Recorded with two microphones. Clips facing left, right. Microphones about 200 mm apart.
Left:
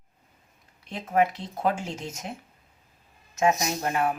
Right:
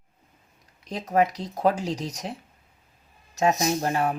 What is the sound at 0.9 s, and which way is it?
Speech, 40° right (ahead or behind).